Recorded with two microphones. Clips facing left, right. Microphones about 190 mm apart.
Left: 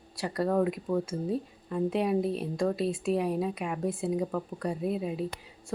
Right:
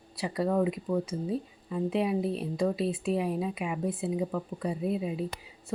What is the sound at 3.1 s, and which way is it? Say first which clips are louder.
Speech: left 1 dB; centre (ahead or behind).